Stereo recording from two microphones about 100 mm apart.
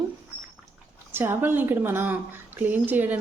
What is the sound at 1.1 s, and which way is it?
A woman's voice, 20° right (ahead or behind).